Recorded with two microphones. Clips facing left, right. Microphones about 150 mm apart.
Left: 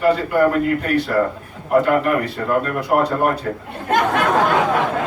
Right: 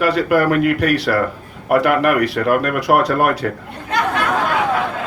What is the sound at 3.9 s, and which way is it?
Speech, 50° left (ahead or behind).